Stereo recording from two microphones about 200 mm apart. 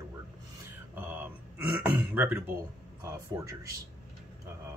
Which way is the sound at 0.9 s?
10° right (ahead or behind).